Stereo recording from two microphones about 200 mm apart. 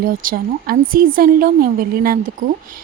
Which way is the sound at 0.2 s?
45° right (ahead or behind).